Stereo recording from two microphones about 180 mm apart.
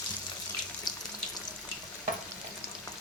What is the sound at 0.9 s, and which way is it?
Water tap, 20° left (ahead or behind).